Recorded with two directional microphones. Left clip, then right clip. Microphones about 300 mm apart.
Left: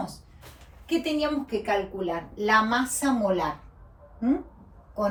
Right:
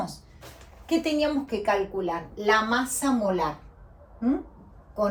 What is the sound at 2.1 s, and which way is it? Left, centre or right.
A woman's voice, centre.